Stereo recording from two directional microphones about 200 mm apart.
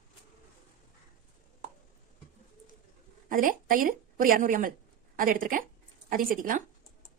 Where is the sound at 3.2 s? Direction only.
45° right (ahead or behind).